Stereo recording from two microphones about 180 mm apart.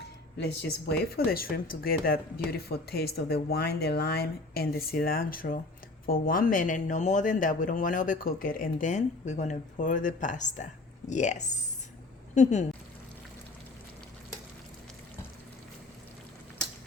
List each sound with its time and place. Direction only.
0.3 s speech: 70° left (ahead or behind); by 12.6 s 40° left (ahead or behind)